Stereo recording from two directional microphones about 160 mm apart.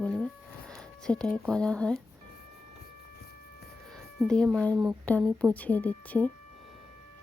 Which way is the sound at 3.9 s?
Centre (ahead or behind).